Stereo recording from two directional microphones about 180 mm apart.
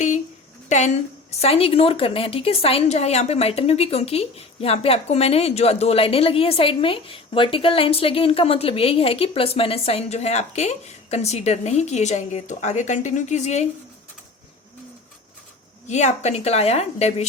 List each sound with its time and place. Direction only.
0.7 s a woman's voice: 40° left (ahead or behind)
15.9 s a woman's voice: 40° left (ahead or behind)